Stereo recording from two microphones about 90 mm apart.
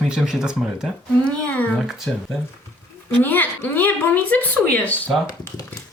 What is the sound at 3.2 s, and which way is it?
A child's voice, 20° left (ahead or behind).